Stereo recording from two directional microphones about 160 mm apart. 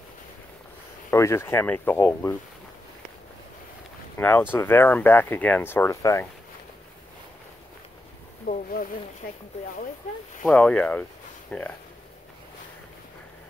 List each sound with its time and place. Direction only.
1.1 s speech: 15° left (ahead or behind)
4.2 s speech: 10° left (ahead or behind)
8.5 s speech: 60° left (ahead or behind)
10.4 s speech: 10° left (ahead or behind)